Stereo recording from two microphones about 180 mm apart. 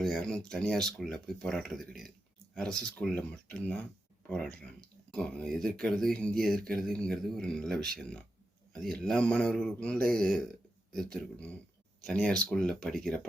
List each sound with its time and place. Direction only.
0.0 s speech: centre (ahead or behind)